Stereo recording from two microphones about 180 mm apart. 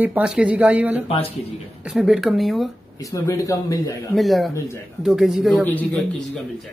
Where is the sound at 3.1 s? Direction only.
15° left (ahead or behind).